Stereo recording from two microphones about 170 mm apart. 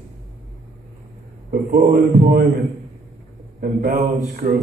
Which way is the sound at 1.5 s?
55° right (ahead or behind).